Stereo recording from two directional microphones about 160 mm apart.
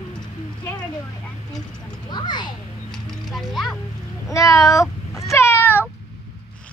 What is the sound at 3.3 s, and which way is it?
Music, centre (ahead or behind).